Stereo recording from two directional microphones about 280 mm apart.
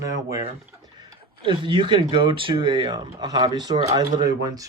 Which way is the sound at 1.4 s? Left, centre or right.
Centre.